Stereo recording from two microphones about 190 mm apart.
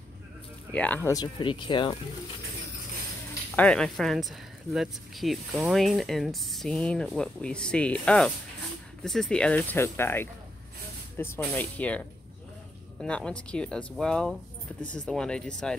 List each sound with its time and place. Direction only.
0.7 s speech: 10° left (ahead or behind)
1.1 s speech: 25° left (ahead or behind)
3.5 s speech: 5° left (ahead or behind)
13.0 s speech: 5° left (ahead or behind)